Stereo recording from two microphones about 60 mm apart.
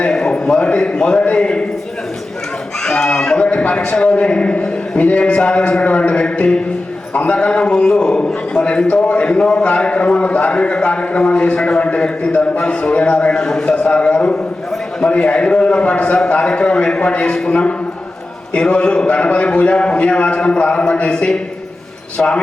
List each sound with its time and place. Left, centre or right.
0.1 s a man's voice: centre
2.8 s a man's voice: centre
13.3 s a man's voice: centre